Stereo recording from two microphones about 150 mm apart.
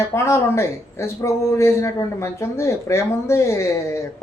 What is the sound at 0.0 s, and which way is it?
Speech, 20° left (ahead or behind).